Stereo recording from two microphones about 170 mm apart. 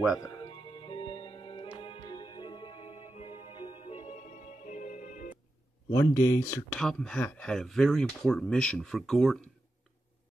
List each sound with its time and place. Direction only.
0.4 s music: 30° left (ahead or behind); by 5.3 s 50° left (ahead or behind)
5.9 s speech: 15° left (ahead or behind)
6.8 s speech: 5° left (ahead or behind)